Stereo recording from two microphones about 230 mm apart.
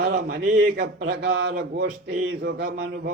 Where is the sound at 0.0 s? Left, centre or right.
Right.